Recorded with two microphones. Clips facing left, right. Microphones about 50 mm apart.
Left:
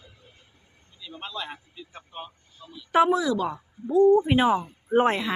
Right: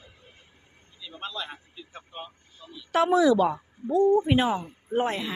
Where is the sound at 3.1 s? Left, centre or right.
Centre.